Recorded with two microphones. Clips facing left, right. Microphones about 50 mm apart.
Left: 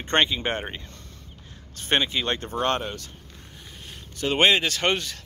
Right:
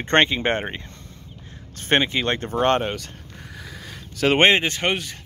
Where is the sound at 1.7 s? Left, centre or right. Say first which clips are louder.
Right 4 dB; right.